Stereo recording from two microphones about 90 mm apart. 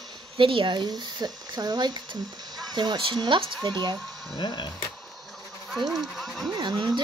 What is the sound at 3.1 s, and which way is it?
Speech, 65° right (ahead or behind).